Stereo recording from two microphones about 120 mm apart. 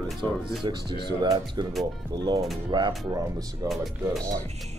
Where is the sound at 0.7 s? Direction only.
40° right (ahead or behind).